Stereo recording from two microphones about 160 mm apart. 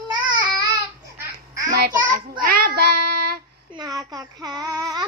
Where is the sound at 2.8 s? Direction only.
75° right (ahead or behind).